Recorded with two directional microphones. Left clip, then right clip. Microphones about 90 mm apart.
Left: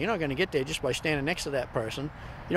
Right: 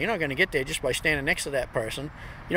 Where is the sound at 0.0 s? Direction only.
40° left (ahead or behind).